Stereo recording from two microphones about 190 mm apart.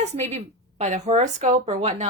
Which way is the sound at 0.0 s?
35° right (ahead or behind).